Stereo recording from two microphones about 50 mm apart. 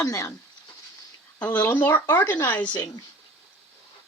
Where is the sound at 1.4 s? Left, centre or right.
Left.